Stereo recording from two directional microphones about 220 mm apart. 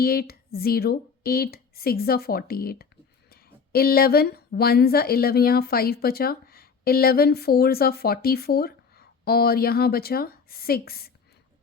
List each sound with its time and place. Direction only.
0.0 s speech: 45° left (ahead or behind)